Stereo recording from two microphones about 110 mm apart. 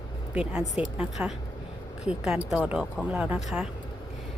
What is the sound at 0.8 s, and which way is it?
Speech, 5° right (ahead or behind).